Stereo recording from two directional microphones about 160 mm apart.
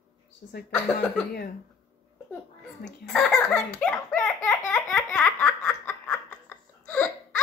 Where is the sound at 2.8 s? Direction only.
5° left (ahead or behind).